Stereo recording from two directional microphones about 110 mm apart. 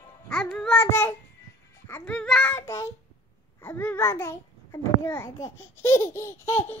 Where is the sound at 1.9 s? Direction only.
15° left (ahead or behind).